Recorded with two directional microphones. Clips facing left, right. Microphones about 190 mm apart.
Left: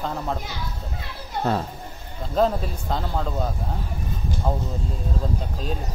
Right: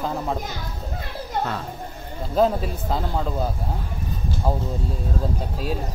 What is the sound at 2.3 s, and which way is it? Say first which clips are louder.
A man's voice: right 2 dB; centre (ahead or behind).